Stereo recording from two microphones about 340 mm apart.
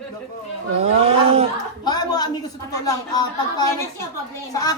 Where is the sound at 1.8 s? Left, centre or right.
Centre.